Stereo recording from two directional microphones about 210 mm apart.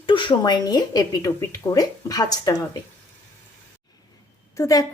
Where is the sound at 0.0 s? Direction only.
25° left (ahead or behind).